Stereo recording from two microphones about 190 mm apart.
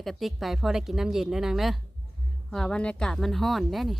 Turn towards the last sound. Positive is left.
turn(degrees=0)  # may be behind; listen again after turning